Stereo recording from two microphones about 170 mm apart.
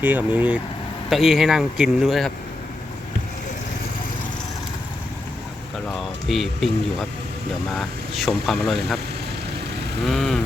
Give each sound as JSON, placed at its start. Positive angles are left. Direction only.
{"t": 0.0, "sound": "speech", "side_deg": -10}
{"t": 6.0, "sound": "speech", "side_deg": 0}
{"t": 7.7, "sound": "speech", "side_deg": 0}
{"t": 10.1, "sound": "speech", "side_deg": 0}